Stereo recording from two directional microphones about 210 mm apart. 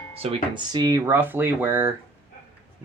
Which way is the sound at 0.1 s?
30° right (ahead or behind).